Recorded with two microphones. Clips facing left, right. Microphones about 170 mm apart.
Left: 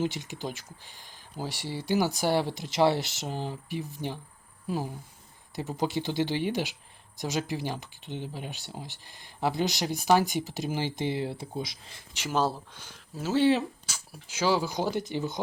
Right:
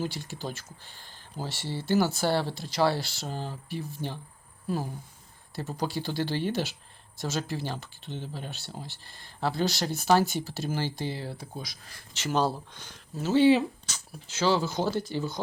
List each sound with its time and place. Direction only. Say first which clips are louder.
0.0 s speech: left 2 dB; 20° left (ahead or behind)
12.1 s speech: right 1 dB; 10° left (ahead or behind)